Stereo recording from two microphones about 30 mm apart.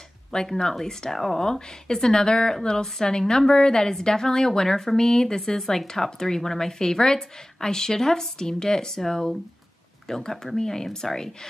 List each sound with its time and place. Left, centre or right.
0.3 s a woman's voice: left
1.1 s a woman's voice: centre